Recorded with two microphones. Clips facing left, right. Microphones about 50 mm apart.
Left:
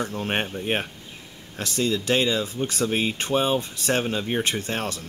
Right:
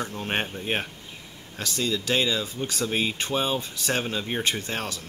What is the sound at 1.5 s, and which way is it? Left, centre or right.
Speech, left.